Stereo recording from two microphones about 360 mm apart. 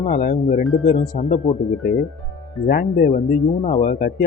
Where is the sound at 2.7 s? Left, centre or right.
Left.